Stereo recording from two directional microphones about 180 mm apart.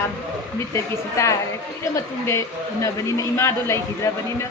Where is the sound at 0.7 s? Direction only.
15° left (ahead or behind).